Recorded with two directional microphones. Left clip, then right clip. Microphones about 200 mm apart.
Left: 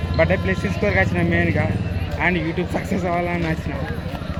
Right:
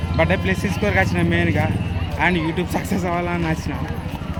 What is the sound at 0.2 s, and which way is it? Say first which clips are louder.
Speech: even; 15° right (ahead or behind).